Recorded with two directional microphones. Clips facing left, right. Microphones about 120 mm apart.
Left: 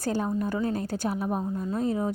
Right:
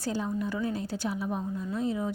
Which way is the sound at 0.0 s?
50° left (ahead or behind).